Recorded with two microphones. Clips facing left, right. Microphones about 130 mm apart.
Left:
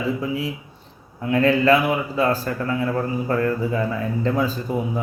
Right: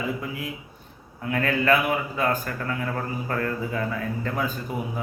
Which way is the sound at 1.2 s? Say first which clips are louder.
Left 7 dB; 25° left (ahead or behind).